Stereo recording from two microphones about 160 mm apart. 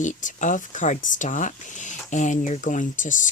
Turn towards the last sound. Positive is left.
turn(degrees=50)  # may be behind; listen again after turning